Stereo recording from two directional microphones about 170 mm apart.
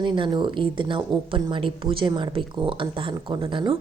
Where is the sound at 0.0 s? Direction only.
30° right (ahead or behind).